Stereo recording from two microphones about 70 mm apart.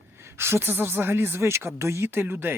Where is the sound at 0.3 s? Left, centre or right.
Right.